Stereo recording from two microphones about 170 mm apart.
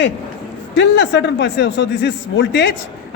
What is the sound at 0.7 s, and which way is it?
Speech, 90° left.